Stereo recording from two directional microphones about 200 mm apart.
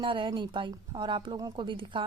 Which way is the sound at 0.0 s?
25° right (ahead or behind).